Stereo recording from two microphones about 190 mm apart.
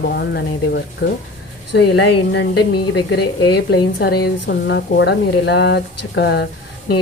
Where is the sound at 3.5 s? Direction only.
60° left (ahead or behind).